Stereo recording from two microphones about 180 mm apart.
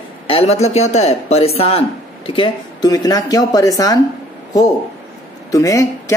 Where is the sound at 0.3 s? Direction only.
35° left (ahead or behind); by 4.0 s 20° left (ahead or behind).